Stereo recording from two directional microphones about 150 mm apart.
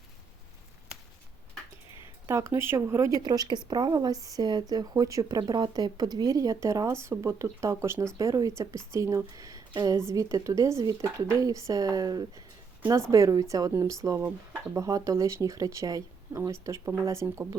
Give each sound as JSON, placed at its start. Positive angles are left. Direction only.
{"t": 2.2, "sound": "speech", "side_deg": -15}